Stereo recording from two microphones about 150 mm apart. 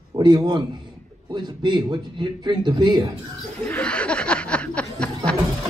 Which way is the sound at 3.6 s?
10° left (ahead or behind).